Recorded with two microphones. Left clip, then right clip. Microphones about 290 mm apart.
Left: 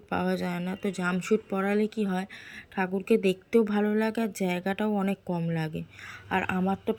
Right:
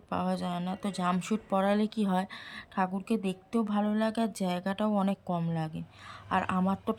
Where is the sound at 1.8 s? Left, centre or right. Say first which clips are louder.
Left 2 dB; right.